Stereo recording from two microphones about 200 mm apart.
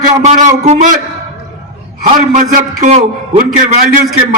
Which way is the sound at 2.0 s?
40° right (ahead or behind).